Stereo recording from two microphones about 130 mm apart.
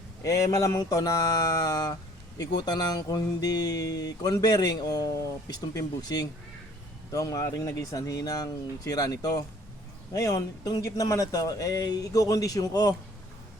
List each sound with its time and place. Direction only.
0.2 s speech: 25° left (ahead or behind)